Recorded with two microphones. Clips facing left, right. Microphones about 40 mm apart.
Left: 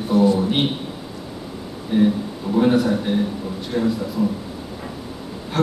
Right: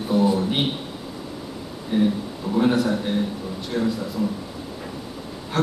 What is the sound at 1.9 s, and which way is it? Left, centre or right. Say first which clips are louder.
A man's voice: left 3 dB; centre.